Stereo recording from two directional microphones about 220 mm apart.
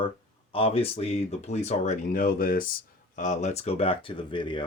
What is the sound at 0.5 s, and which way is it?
Speech, 25° left (ahead or behind).